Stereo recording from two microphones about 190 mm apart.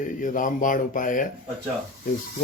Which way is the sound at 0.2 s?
45° left (ahead or behind).